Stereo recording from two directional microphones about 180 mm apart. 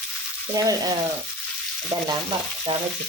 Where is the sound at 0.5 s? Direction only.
20° right (ahead or behind).